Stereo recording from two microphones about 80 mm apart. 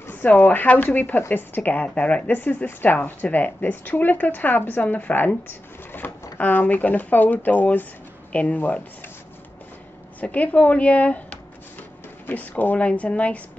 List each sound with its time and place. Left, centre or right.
0.0 s a woman's voice: left
5.9 s drawer open or close: left
6.3 s a woman's voice: left
10.2 s speech: centre